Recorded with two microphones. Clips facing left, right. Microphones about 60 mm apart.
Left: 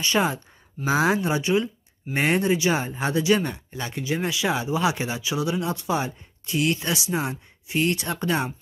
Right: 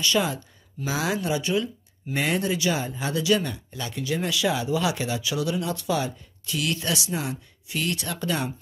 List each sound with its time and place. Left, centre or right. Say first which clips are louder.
0.0 s speech: left 1 dB; left